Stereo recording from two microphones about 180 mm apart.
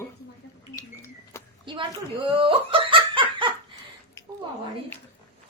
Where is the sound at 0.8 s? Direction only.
15° left (ahead or behind).